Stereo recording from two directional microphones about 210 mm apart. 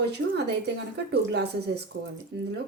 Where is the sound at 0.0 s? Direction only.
50° right (ahead or behind).